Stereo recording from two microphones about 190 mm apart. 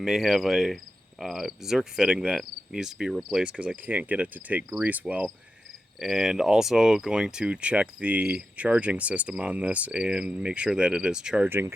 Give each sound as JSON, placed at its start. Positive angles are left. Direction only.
{"t": 0.0, "sound": "speech", "side_deg": 0}